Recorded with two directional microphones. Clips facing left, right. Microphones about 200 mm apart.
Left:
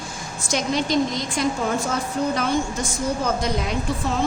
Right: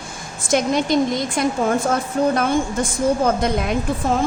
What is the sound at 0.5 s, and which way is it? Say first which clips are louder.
A woman's voice: right 4 dB; 55° right (ahead or behind).